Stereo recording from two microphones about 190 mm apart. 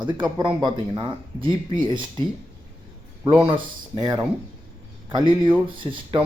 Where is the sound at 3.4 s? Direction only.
25° right (ahead or behind).